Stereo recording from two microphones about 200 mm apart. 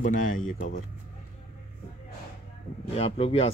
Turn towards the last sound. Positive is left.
turn(degrees=30)  # may be behind; listen again after turning